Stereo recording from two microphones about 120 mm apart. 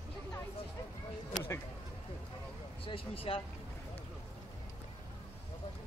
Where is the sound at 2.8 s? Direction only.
50° left (ahead or behind).